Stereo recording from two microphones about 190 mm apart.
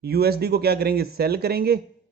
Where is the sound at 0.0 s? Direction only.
55° right (ahead or behind).